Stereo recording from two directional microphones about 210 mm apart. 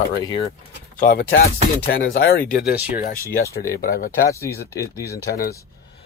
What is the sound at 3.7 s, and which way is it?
Speech, 45° left (ahead or behind).